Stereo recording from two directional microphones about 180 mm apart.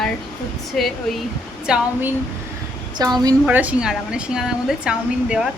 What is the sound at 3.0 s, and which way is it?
Speech, 20° right (ahead or behind).